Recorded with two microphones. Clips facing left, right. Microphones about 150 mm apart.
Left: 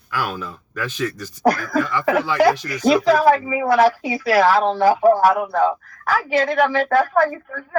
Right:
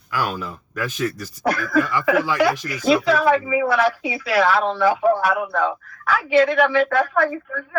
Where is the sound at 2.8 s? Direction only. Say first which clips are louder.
Left 3 dB; 40° left (ahead or behind).